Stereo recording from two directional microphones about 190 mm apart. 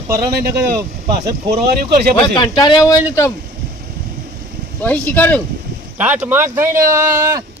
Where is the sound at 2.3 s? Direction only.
25° left (ahead or behind).